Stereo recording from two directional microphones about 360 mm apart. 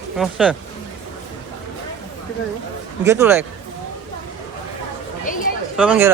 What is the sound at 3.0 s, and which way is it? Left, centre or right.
Speech, centre.